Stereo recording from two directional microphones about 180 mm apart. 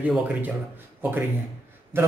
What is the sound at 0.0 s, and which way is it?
Speech, 10° right (ahead or behind).